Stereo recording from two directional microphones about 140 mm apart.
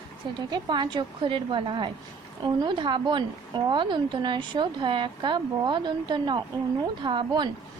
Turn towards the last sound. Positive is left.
turn(degrees=-35)  # may be behind; listen again after turning